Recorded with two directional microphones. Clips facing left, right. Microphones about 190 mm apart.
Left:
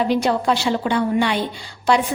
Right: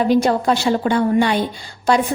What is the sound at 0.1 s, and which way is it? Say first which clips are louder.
A woman's voice: right 3 dB; 45° right (ahead or behind).